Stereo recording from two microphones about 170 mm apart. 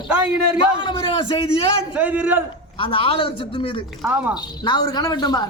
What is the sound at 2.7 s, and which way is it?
Speech, 30° left (ahead or behind).